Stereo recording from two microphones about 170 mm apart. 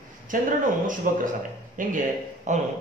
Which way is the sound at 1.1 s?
55° right (ahead or behind).